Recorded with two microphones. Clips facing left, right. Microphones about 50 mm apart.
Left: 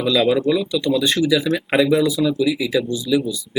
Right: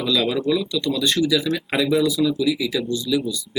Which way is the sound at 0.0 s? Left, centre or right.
Centre.